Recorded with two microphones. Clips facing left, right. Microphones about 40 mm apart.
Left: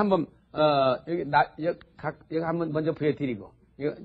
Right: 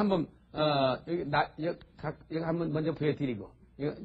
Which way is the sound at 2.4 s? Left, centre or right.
Centre.